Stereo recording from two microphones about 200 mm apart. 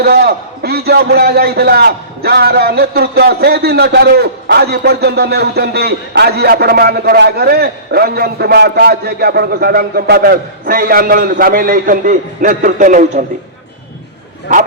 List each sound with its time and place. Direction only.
0.0 s a man's voice: 50° right (ahead or behind)